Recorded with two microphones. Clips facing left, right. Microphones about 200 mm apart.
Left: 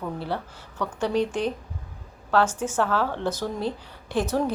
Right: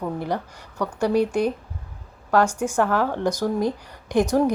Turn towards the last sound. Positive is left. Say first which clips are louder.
# right 5 dB
turn(degrees=-15)  # may be behind; listen again after turning